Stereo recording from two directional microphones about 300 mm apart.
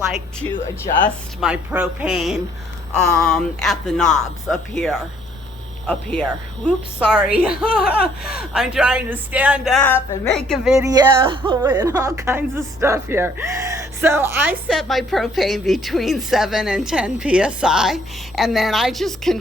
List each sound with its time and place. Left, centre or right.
0.1 s speech: centre
8.2 s speech: left
8.5 s speech: centre